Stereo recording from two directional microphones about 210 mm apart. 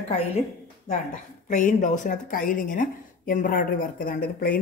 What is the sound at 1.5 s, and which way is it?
A woman's voice, 35° left (ahead or behind).